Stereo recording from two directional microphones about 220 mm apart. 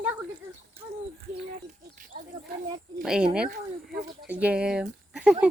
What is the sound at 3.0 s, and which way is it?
Speech, 5° right (ahead or behind).